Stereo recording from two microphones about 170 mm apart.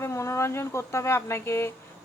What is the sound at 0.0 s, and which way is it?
Speech, 15° left (ahead or behind).